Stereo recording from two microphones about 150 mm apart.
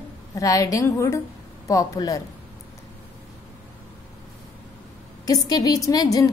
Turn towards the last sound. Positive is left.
turn(degrees=25)  # may be behind; listen again after turning